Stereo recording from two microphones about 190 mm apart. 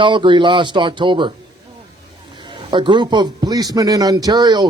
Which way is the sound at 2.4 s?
25° right (ahead or behind).